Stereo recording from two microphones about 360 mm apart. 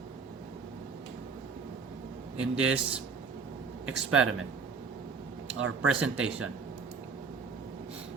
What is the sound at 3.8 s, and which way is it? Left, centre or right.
Speech, right.